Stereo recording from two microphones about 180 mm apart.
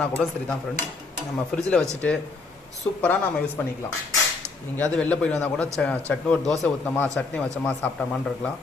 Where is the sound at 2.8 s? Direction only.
15° left (ahead or behind).